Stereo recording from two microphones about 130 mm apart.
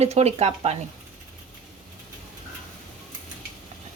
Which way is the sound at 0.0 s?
55° right (ahead or behind).